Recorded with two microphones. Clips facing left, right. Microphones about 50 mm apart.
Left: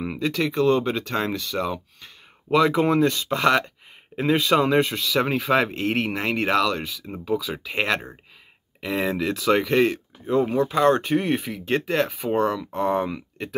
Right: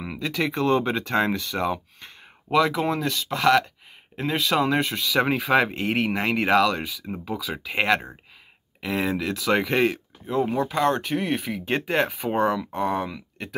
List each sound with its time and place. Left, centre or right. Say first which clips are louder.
0.0 s a sound: left 4 dB; centre
0.5 s speech: left 1 dB; right
2.5 s speech: left 3 dB; centre